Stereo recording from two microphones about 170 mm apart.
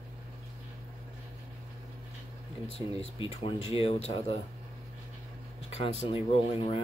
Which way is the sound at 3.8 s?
35° left (ahead or behind).